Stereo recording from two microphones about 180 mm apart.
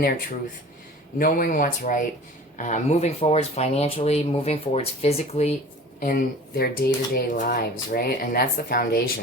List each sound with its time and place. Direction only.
1.2 s speech: 50° left (ahead or behind)
6.0 s speech: 55° left (ahead or behind)